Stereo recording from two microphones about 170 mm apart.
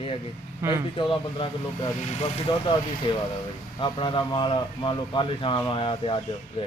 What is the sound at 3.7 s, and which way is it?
A man's voice, 30° left (ahead or behind).